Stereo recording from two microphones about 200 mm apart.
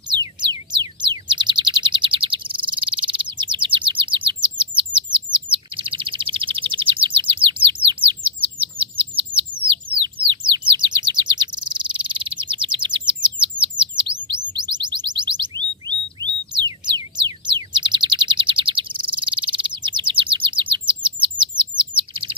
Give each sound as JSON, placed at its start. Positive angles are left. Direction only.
{"t": 0.1, "sound": "music", "side_deg": -20}
{"t": 1.0, "sound": "chirp", "side_deg": -20}
{"t": 10.7, "sound": "bird", "side_deg": -20}
{"t": 14.2, "sound": "alarm", "side_deg": -20}
{"t": 17.2, "sound": "chirp", "side_deg": -25}
{"t": 19.0, "sound": "bird", "side_deg": -25}